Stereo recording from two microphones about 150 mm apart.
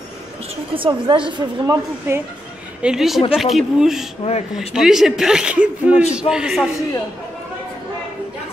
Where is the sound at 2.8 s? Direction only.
5° right (ahead or behind).